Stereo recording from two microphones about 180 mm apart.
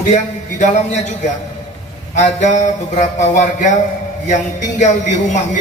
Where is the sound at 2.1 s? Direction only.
40° left (ahead or behind).